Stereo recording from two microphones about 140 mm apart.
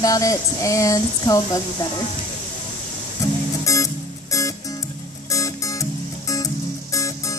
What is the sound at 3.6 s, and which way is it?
Music, 25° left (ahead or behind).